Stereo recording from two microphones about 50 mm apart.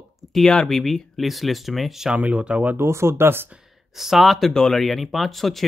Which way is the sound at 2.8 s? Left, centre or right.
Right.